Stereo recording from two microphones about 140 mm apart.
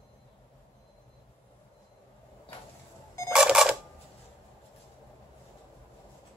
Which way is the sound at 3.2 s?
5° right (ahead or behind).